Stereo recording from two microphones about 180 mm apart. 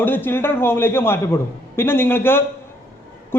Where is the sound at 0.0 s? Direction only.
10° left (ahead or behind).